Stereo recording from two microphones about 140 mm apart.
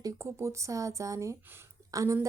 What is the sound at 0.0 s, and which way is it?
A woman's voice, 20° right (ahead or behind).